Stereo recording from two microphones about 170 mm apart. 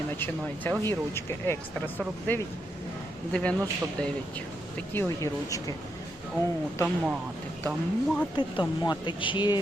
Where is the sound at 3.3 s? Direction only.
10° left (ahead or behind).